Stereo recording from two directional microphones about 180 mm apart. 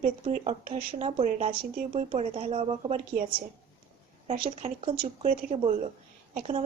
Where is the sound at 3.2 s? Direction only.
55° right (ahead or behind).